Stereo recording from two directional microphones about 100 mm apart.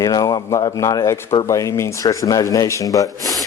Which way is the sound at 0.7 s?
35° left (ahead or behind).